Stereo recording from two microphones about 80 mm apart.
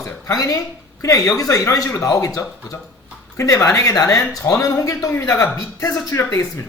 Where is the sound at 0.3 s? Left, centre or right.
Left.